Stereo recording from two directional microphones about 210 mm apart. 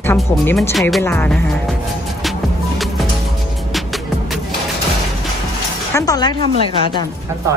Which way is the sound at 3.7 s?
Centre (ahead or behind).